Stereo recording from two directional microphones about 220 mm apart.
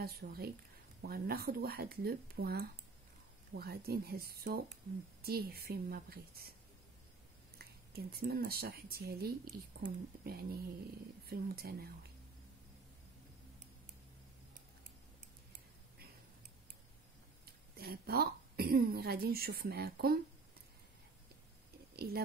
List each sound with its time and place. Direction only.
0.0 s speech: 45° right (ahead or behind)
7.5 s speech: 45° right (ahead or behind)
17.7 s speech: 45° right (ahead or behind)
21.9 s a sound: 45° right (ahead or behind)